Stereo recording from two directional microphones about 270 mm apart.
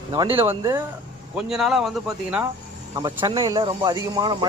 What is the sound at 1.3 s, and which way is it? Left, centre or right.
Speech, centre.